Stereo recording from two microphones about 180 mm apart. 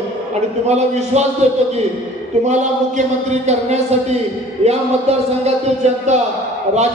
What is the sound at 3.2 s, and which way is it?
Music, 40° right (ahead or behind).